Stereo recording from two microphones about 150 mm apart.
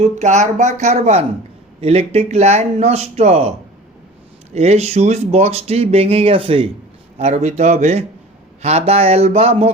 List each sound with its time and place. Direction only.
0.0 s speech: 50° right (ahead or behind)
4.5 s speech: 45° right (ahead or behind)
7.2 s speech: 50° right (ahead or behind)